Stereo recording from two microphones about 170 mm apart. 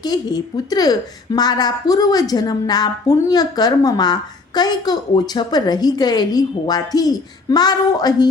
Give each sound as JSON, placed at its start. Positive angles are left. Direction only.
{"t": 0.0, "sound": "a woman's voice", "side_deg": 25}